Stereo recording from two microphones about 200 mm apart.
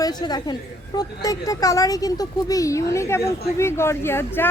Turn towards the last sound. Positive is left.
turn(degrees=10)  # may be behind; listen again after turning